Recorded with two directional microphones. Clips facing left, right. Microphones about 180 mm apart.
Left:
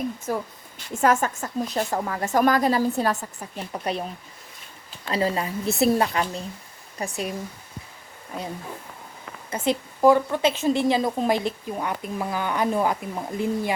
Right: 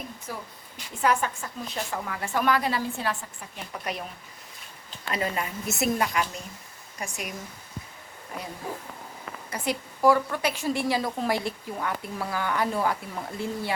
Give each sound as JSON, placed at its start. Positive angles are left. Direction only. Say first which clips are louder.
{"t": 0.3, "sound": "speech", "louder": "left 10 dB", "side_deg": 45}
{"t": 5.1, "sound": "speech", "louder": "left 5 dB", "side_deg": 30}
{"t": 9.5, "sound": "a woman's voice", "louder": "left 6 dB", "side_deg": 20}